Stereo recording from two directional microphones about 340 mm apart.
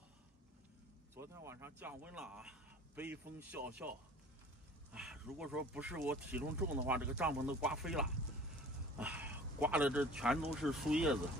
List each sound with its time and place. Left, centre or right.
1.1 s speech: centre
4.9 s speech: centre